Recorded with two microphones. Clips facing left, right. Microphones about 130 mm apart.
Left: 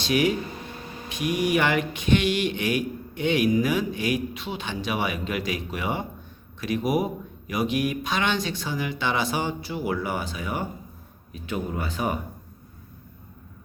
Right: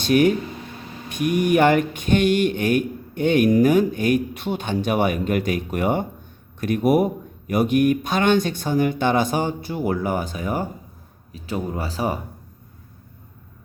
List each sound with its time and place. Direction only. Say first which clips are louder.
0.0 s speech: right 6 dB; 50° right (ahead or behind); by 12.2 s 30° right (ahead or behind)